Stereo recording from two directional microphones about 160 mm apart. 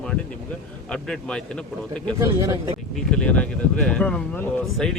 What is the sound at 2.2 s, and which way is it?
Speech, 20° right (ahead or behind).